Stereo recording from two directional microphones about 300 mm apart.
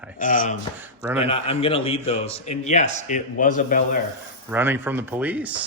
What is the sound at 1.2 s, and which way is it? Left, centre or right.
A man's voice, centre.